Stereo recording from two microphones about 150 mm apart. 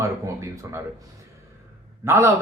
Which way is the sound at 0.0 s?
20° right (ahead or behind).